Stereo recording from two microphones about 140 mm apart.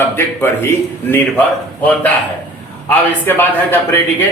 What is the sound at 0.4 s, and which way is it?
Speech, 15° left (ahead or behind).